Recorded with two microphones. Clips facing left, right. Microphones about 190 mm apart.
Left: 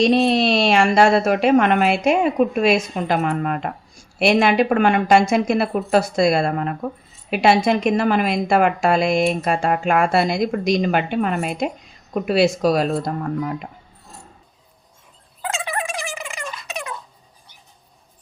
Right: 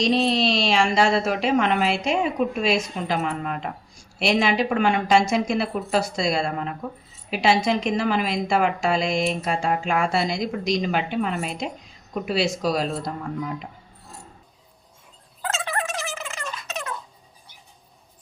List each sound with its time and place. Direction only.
0.0 s a woman's voice: 55° left (ahead or behind)
15.4 s gobble: 15° left (ahead or behind)